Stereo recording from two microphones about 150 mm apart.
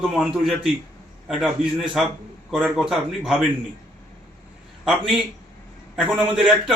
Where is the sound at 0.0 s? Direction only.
Centre (ahead or behind).